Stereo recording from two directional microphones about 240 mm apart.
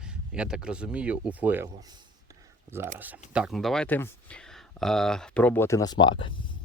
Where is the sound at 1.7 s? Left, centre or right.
Centre.